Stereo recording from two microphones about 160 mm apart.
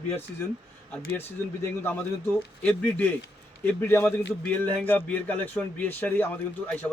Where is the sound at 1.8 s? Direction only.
15° left (ahead or behind).